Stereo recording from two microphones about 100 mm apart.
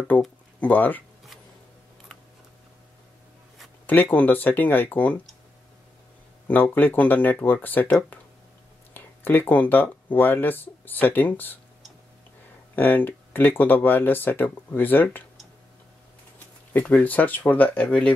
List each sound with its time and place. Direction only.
0.1 s speech: 15° left (ahead or behind)
3.8 s speech: 20° left (ahead or behind)
6.4 s speech: 15° left (ahead or behind)
12.7 s speech: 20° left (ahead or behind)
16.7 s speech: 15° left (ahead or behind)